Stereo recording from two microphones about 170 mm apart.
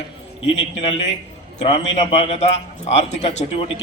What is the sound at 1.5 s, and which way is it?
A man's voice, 35° left (ahead or behind).